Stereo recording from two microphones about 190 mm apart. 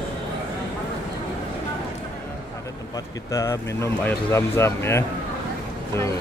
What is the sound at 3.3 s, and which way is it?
Speech, 15° left (ahead or behind).